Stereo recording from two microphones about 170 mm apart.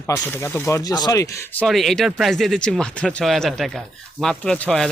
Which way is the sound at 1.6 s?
Centre (ahead or behind).